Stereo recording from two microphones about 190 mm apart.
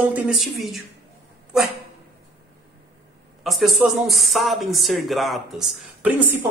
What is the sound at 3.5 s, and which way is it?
Speech, centre (ahead or behind).